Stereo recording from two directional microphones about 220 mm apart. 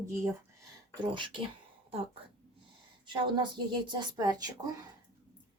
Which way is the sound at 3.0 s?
20° right (ahead or behind).